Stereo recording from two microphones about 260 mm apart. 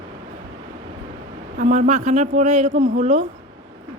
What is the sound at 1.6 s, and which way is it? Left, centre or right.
A man's voice, right.